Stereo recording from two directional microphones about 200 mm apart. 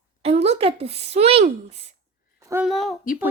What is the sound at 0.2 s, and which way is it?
Speech, 30° right (ahead or behind).